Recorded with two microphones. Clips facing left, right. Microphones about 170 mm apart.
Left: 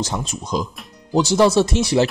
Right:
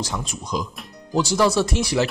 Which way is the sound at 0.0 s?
25° left (ahead or behind).